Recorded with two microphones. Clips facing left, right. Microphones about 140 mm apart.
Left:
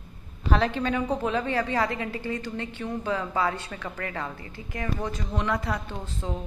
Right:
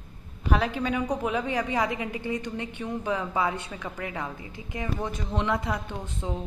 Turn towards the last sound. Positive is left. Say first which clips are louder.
# even
turn(degrees=-15)  # may be behind; listen again after turning